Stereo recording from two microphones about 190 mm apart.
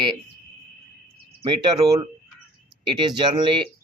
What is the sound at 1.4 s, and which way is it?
Speech, 25° right (ahead or behind).